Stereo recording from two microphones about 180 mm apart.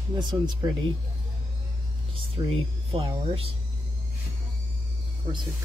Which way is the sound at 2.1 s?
30° right (ahead or behind).